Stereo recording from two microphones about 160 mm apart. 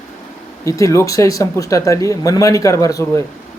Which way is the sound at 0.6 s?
20° left (ahead or behind).